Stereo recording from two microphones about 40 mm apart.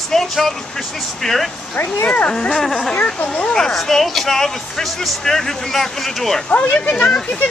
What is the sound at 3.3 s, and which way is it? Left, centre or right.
Speech, centre.